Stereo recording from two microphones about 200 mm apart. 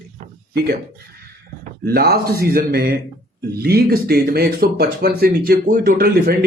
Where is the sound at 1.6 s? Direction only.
50° right (ahead or behind).